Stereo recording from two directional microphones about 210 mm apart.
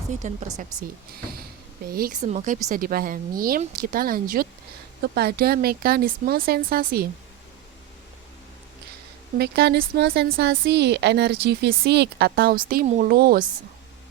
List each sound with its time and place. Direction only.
0.1 s speech: 35° right (ahead or behind)
1.9 s speech: 45° right (ahead or behind)
9.4 s speech: 50° right (ahead or behind)